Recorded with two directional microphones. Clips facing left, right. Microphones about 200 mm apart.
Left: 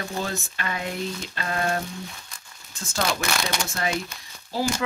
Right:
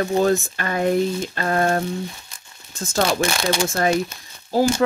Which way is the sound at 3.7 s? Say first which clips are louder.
Right 8 dB; 45° right (ahead or behind).